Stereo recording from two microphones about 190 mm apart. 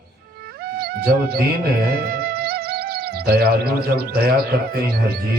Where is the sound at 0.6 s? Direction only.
50° right (ahead or behind).